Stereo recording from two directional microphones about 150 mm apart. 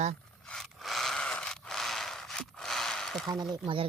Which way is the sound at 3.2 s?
25° right (ahead or behind).